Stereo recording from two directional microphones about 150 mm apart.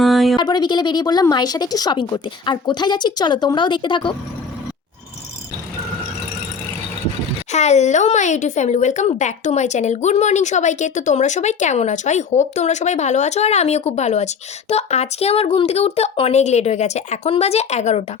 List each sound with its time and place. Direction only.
0.0 s a sound: centre (ahead or behind)
0.3 s a woman's voice: 30° left (ahead or behind)
7.5 s a woman's voice: 50° left (ahead or behind)